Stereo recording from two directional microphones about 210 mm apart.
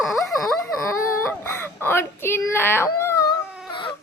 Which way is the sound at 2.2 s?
10° left (ahead or behind).